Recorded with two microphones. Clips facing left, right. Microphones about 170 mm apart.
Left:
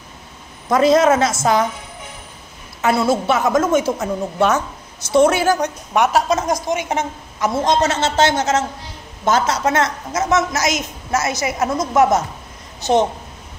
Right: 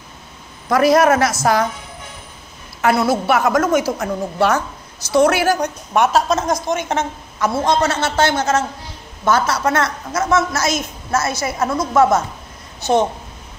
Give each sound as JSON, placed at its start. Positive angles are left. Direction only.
{"t": 0.7, "sound": "a woman's voice", "side_deg": 20}
{"t": 2.8, "sound": "a woman's voice", "side_deg": 25}